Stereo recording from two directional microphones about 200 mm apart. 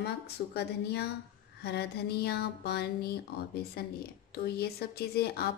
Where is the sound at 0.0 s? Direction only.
55° left (ahead or behind).